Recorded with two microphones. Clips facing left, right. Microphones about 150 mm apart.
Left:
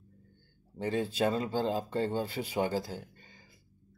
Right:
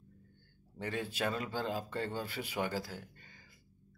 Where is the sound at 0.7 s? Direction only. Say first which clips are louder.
Left 7 dB; 30° left (ahead or behind).